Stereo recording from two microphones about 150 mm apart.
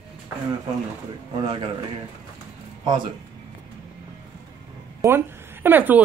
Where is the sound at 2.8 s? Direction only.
30° right (ahead or behind).